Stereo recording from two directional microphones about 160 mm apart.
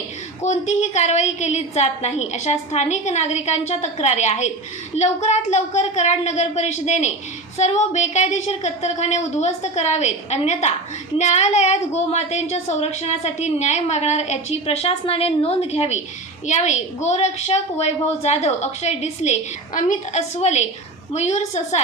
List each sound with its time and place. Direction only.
0.4 s a woman's voice: 45° left (ahead or behind)